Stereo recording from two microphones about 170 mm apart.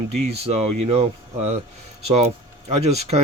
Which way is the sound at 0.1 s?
40° right (ahead or behind).